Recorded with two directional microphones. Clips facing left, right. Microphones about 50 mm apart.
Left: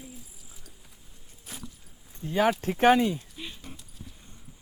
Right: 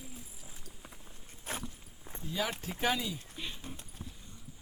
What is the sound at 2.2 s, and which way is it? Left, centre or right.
Speech, left.